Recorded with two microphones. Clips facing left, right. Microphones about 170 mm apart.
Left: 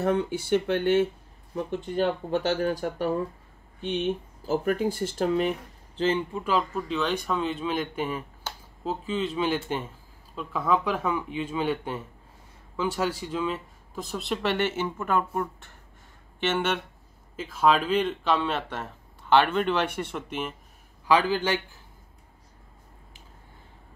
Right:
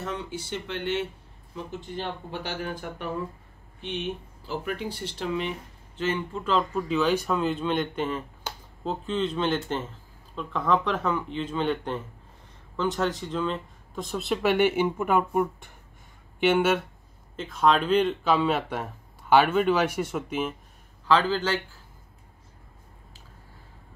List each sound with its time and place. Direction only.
0.0 s speech: 55° left (ahead or behind); by 3.1 s 40° left (ahead or behind)
4.5 s speech: 45° left (ahead or behind)
6.3 s speech: 10° left (ahead or behind); by 16.8 s 10° right (ahead or behind)
17.4 s speech: 5° left (ahead or behind)
21.1 s speech: 10° left (ahead or behind)